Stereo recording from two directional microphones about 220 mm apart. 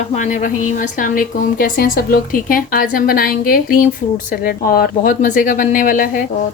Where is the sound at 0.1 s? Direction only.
35° left (ahead or behind).